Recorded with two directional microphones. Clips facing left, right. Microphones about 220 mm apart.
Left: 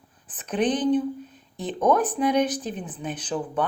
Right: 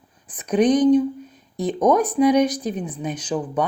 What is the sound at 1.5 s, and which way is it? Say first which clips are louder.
Speech: right 5 dB; 45° right (ahead or behind).